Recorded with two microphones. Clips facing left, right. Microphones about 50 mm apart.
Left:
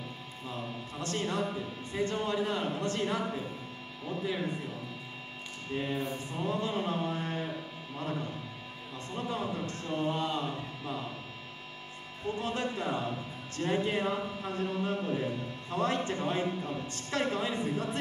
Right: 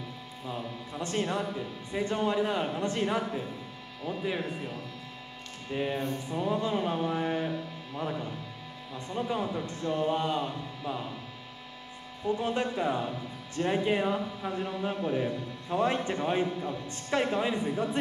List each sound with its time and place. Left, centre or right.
0.5 s a sound: centre
1.9 s a man's voice: centre
5.7 s a man's voice: centre
9.8 s a sound: centre
10.1 s a man's voice: centre
12.4 s a man's voice: centre